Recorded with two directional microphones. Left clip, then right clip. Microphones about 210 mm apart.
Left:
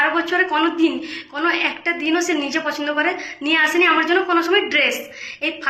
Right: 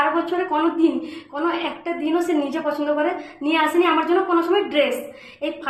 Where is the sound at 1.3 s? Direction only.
15° right (ahead or behind).